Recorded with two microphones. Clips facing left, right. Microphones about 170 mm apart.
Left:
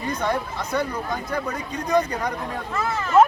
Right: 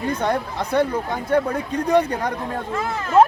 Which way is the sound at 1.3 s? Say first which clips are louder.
Right 7 dB; 60° right (ahead or behind).